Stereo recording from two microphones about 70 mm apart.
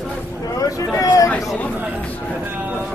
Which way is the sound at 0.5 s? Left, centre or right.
Left.